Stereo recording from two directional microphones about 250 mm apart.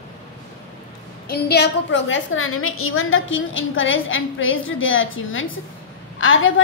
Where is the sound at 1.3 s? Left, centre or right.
Left.